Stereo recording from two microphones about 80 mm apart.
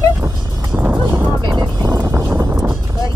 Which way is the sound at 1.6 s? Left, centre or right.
Right.